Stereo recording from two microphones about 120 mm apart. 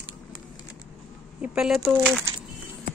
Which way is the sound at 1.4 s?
5° right (ahead or behind).